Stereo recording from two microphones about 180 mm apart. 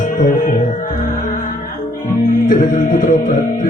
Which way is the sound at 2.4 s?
45° left (ahead or behind).